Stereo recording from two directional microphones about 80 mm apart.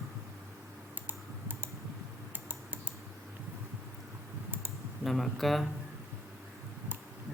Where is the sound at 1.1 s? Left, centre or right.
Right.